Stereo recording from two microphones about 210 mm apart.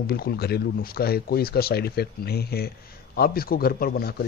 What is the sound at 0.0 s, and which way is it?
Speech, 50° left (ahead or behind).